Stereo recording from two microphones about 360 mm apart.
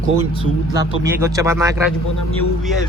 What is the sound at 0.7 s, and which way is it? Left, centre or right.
Speech, centre.